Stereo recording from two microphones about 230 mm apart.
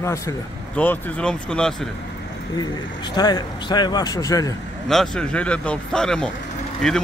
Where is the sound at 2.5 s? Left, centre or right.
Centre.